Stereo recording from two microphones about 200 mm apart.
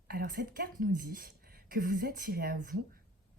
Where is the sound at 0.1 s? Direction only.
45° right (ahead or behind).